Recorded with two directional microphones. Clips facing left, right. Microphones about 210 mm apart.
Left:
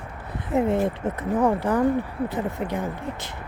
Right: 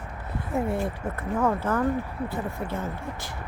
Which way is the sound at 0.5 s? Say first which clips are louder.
Left 6 dB; 20° left (ahead or behind).